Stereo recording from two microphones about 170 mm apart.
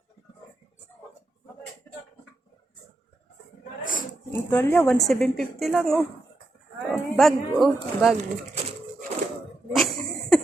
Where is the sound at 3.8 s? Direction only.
50° left (ahead or behind).